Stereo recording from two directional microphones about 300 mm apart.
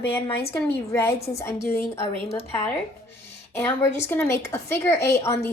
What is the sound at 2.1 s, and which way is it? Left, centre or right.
Speech, left.